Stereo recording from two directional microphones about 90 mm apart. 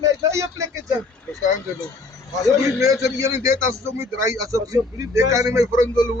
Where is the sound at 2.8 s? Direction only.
40° right (ahead or behind).